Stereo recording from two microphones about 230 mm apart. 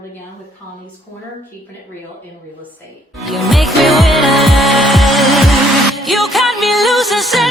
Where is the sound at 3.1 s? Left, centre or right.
Centre.